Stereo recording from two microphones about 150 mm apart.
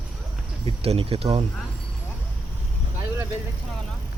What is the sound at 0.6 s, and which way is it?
Speech, 40° right (ahead or behind).